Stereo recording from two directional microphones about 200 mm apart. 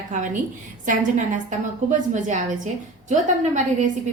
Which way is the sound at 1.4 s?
40° right (ahead or behind).